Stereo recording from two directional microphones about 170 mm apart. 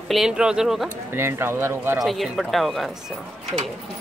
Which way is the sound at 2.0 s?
Centre (ahead or behind).